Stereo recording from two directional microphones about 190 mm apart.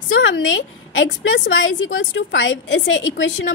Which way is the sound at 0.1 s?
90° left.